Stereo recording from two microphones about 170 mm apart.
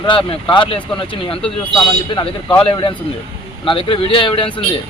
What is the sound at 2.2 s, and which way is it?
A man's voice, 25° left (ahead or behind).